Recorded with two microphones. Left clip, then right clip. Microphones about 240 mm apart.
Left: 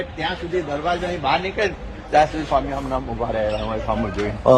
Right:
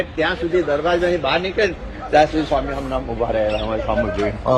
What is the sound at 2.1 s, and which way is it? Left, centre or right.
Speech, centre.